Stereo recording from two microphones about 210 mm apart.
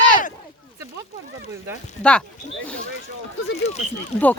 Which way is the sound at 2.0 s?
5° left (ahead or behind).